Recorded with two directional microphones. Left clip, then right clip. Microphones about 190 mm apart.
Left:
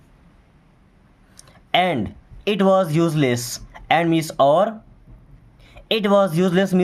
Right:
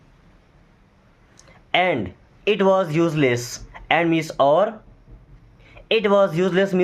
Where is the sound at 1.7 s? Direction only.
45° left (ahead or behind).